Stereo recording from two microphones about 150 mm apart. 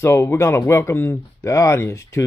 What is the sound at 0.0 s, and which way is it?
A man's voice, 15° left (ahead or behind).